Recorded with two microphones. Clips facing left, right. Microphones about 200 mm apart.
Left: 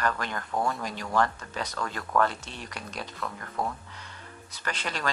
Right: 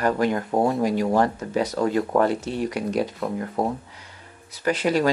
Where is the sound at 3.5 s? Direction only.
30° right (ahead or behind).